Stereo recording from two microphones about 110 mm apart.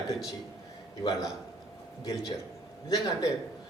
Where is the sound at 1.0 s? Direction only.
30° left (ahead or behind).